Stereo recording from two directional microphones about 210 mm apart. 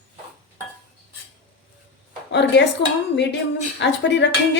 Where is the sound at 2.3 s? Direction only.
55° left (ahead or behind).